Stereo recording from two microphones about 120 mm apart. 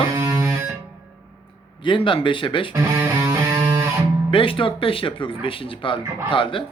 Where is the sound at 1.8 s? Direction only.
45° left (ahead or behind).